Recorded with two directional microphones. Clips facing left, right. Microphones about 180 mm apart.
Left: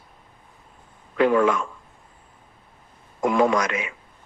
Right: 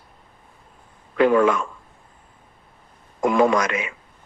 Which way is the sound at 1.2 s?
65° right (ahead or behind).